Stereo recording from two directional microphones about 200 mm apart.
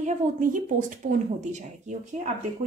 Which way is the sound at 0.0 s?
40° right (ahead or behind).